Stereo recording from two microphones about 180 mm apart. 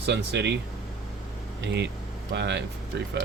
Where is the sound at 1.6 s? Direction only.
70° right (ahead or behind).